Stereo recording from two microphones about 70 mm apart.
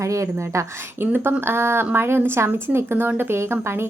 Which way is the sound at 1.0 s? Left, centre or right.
Right.